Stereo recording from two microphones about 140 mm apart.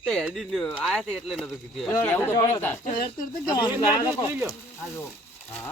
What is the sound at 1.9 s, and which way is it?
Speech, 15° left (ahead or behind).